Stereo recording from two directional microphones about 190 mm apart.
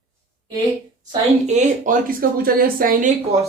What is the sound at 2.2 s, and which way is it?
Speech, 50° right (ahead or behind).